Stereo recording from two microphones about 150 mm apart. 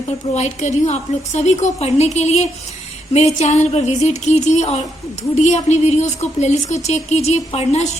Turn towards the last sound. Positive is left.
turn(degrees=50)  # may be behind; listen again after turning